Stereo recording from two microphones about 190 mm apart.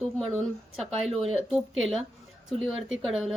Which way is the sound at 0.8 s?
30° right (ahead or behind).